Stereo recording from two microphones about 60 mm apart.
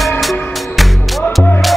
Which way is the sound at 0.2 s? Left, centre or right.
Centre.